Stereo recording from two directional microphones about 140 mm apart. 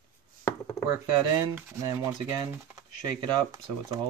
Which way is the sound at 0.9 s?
25° right (ahead or behind).